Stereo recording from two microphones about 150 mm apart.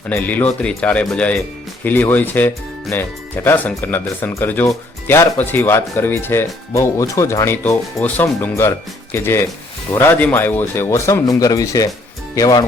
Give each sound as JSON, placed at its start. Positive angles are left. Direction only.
{"t": 0.1, "sound": "speech", "side_deg": 10}